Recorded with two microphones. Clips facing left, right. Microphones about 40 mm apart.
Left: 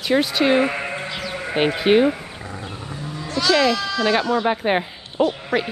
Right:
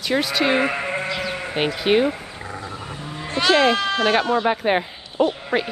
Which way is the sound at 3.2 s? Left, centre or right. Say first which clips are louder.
Right 1 dB; right.